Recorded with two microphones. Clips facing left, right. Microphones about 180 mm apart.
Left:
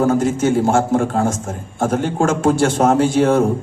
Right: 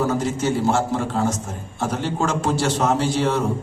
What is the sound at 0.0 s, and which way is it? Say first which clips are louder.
A man's voice: left 6 dB; 50° left (ahead or behind).